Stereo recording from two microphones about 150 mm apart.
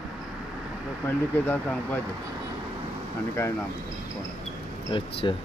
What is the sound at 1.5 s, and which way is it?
Speech, 15° left (ahead or behind).